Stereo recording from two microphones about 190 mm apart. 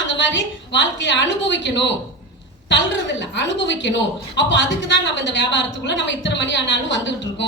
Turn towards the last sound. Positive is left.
turn(degrees=70)  # may be behind; listen again after turning